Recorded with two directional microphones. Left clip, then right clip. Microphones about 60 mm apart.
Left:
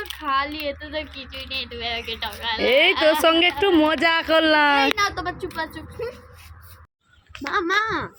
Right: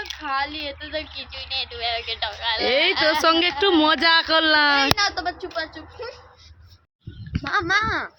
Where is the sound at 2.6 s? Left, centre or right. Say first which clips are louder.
Left 3 dB; left.